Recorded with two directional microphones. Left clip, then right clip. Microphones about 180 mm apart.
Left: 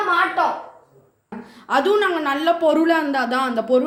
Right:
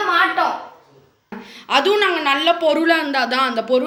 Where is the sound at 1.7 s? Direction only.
35° left (ahead or behind).